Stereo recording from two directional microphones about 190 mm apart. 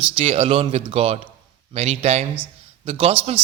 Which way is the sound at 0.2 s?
30° right (ahead or behind).